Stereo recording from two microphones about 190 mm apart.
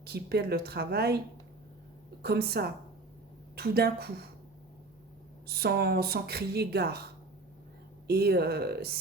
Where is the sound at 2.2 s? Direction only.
55° right (ahead or behind).